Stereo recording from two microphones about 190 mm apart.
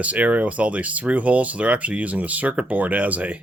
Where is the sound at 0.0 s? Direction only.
5° right (ahead or behind).